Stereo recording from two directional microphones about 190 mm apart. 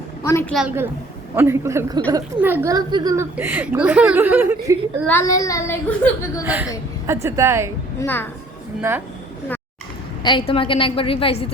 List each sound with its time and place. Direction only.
0.2 s a sound: 15° left (ahead or behind)
0.5 s a woman's voice: 5° right (ahead or behind); by 3.2 s 20° right (ahead or behind)
3.3 s speech: 10° right (ahead or behind)
5.0 s a woman's voice: 15° left (ahead or behind)
6.4 s speech: 10° right (ahead or behind)
7.9 s a woman's voice: 10° left (ahead or behind)
8.9 s speech: 15° right (ahead or behind)
10.2 s a woman's voice: 25° left (ahead or behind)